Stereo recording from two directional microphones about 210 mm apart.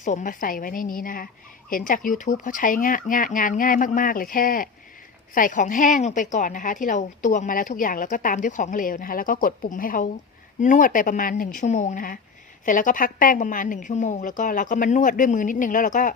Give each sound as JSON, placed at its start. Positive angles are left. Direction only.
{"t": 0.0, "sound": "a woman's voice", "side_deg": 40}